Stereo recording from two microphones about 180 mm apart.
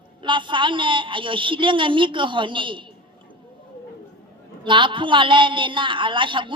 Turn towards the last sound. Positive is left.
turn(degrees=-25)  # may be behind; listen again after turning